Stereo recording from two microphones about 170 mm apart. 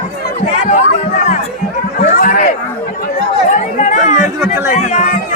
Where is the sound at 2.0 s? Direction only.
55° left (ahead or behind).